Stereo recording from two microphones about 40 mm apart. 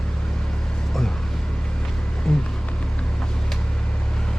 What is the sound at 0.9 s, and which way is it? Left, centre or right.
Vehicle, centre.